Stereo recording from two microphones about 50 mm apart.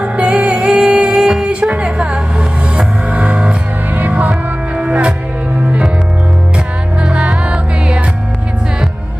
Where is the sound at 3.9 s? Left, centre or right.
Right.